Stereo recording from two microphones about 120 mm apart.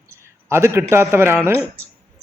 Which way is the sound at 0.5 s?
20° right (ahead or behind).